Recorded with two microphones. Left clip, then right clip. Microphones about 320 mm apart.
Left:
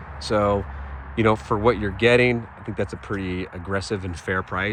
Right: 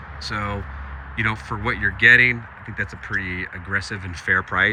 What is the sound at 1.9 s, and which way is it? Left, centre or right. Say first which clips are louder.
Speech: right 8 dB; centre.